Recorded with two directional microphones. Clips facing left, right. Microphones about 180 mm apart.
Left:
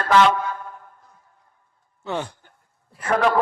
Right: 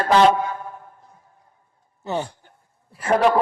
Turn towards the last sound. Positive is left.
turn(degrees=-25)  # may be behind; listen again after turning